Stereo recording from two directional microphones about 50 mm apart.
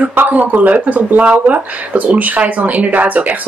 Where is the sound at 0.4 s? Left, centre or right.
Right.